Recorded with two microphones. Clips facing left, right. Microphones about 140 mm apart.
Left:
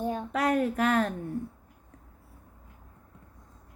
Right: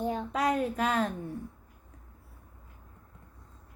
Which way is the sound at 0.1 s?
55° left (ahead or behind).